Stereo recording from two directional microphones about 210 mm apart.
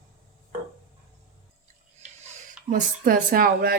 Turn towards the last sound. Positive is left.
turn(degrees=-45)  # may be behind; listen again after turning